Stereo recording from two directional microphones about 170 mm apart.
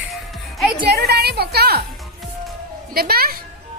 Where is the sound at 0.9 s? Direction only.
70° right (ahead or behind).